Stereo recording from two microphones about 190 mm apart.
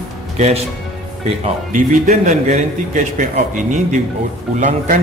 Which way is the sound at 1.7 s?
45° right (ahead or behind).